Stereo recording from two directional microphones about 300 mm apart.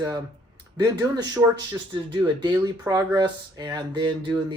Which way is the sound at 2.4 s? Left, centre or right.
Centre.